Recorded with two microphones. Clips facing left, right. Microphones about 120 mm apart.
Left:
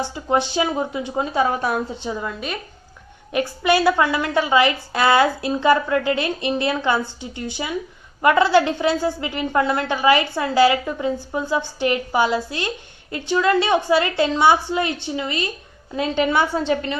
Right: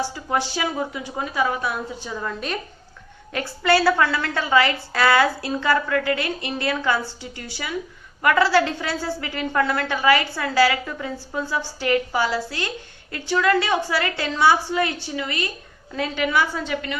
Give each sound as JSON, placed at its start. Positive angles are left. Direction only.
{"t": 0.0, "sound": "a woman's voice", "side_deg": 20}
{"t": 2.1, "sound": "a woman's voice", "side_deg": 5}
{"t": 3.3, "sound": "a woman's voice", "side_deg": 15}